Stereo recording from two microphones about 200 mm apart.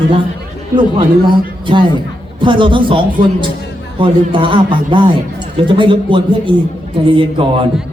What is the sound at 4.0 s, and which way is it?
A woman's voice, 25° right (ahead or behind).